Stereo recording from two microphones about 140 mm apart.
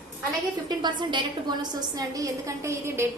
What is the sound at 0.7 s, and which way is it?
A woman's voice, 35° right (ahead or behind).